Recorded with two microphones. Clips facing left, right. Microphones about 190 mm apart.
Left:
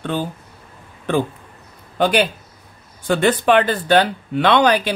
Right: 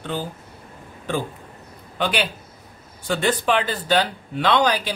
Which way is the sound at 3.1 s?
55° left (ahead or behind).